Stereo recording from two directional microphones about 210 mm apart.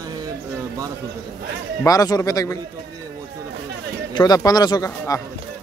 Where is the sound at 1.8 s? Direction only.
15° left (ahead or behind).